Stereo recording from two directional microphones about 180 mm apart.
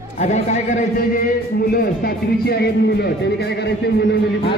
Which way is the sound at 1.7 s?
60° left (ahead or behind).